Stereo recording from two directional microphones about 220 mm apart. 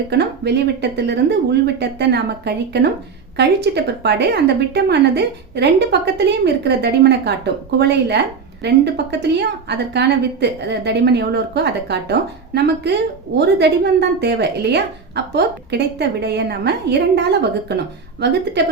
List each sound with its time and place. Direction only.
0.1 s a woman's voice: 50° right (ahead or behind)